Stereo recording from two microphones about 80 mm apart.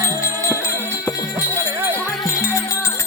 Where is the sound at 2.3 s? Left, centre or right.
Left.